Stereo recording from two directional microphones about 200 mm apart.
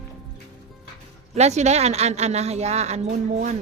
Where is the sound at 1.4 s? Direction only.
35° right (ahead or behind).